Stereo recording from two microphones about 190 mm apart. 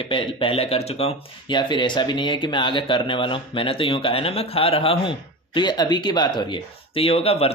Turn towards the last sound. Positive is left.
turn(degrees=30)  # may be behind; listen again after turning